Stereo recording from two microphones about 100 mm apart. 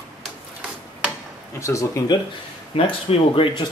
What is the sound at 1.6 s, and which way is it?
Speech, 30° left (ahead or behind).